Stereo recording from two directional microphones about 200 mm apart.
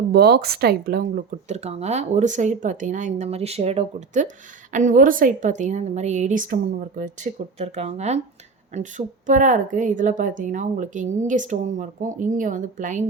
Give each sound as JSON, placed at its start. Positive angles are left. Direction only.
{"t": 0.1, "sound": "a woman's voice", "side_deg": -55}
{"t": 7.6, "sound": "a woman's voice", "side_deg": -30}